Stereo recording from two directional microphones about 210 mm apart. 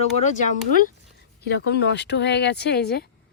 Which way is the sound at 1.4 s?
50° left (ahead or behind).